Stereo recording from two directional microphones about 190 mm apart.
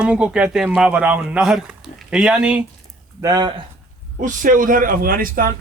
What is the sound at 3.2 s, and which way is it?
Speech, 20° right (ahead or behind).